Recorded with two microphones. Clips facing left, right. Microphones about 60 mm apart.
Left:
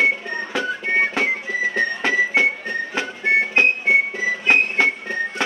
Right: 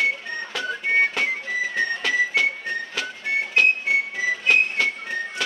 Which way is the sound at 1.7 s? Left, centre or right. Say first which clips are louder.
Left 2 dB; left.